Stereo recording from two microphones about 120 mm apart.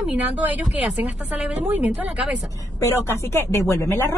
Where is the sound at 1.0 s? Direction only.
15° right (ahead or behind).